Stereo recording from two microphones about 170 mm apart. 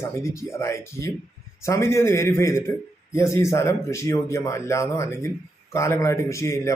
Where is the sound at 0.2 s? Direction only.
15° left (ahead or behind).